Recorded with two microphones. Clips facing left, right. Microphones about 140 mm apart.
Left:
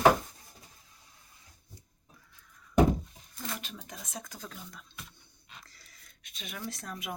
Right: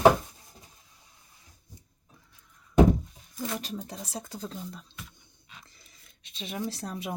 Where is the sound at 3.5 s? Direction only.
35° right (ahead or behind).